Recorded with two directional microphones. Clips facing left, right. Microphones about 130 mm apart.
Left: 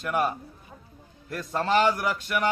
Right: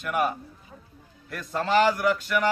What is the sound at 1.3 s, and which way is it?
Speech, 30° left (ahead or behind).